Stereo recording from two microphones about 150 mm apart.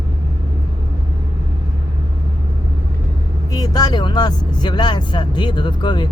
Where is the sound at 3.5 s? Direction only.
25° left (ahead or behind).